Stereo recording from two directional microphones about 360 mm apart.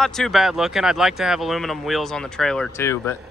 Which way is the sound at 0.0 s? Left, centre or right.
Centre.